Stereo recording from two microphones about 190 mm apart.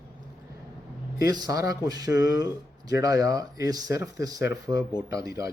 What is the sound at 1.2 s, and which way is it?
Speech, 20° right (ahead or behind).